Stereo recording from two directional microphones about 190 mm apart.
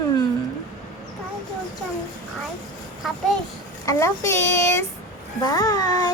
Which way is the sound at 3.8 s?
15° left (ahead or behind).